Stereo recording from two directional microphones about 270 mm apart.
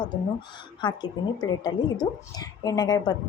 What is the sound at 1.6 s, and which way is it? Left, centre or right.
A woman's voice, centre.